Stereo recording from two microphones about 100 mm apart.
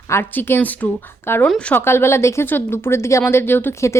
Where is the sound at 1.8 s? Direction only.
25° left (ahead or behind).